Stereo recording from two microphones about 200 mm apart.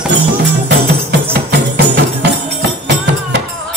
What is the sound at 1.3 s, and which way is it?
Music, 55° right (ahead or behind).